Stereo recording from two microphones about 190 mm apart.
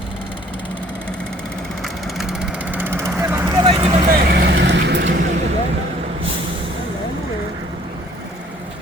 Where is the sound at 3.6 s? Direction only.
25° right (ahead or behind).